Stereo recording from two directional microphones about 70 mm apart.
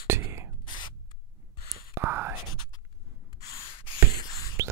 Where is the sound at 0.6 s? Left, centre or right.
Left.